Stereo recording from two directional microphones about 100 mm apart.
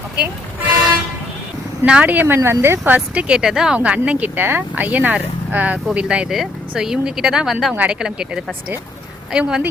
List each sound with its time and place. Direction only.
1.8 s speech: 15° right (ahead or behind)